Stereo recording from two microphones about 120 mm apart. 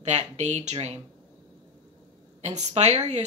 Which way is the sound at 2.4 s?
75° right (ahead or behind).